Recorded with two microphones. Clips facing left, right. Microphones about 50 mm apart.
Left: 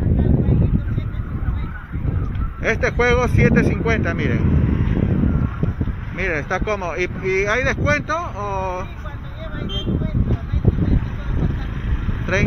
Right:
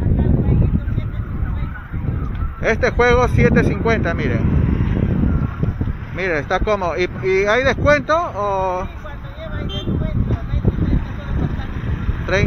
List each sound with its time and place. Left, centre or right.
2.6 s speech: left
4.5 s vehicle: right
6.1 s speech: left